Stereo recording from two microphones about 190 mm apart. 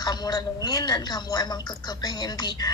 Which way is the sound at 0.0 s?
20° left (ahead or behind).